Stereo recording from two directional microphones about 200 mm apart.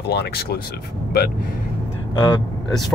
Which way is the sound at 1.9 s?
20° left (ahead or behind).